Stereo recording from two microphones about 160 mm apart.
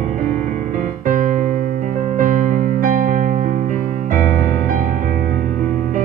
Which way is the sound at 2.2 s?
50° right (ahead or behind).